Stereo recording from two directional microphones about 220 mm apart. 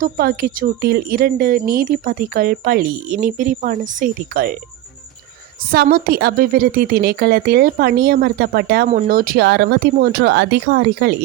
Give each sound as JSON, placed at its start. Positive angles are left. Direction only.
{"t": 0.0, "sound": "a woman's voice", "side_deg": -45}
{"t": 5.7, "sound": "a woman's voice", "side_deg": -45}